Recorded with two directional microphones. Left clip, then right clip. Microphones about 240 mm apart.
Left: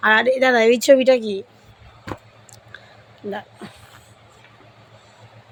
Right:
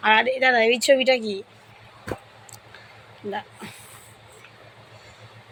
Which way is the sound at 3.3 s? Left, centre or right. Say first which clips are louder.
Left 1 dB; centre.